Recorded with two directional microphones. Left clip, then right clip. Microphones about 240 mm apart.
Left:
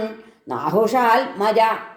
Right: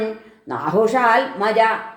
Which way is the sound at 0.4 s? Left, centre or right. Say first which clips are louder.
Right 1 dB; left.